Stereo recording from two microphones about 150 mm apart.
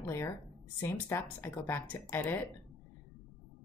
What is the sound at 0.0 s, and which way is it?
A woman's voice, 20° left (ahead or behind).